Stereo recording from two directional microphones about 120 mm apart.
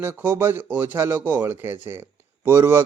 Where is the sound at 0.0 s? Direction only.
20° right (ahead or behind).